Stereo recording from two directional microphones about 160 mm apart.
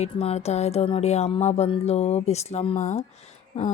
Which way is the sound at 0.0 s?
40° left (ahead or behind).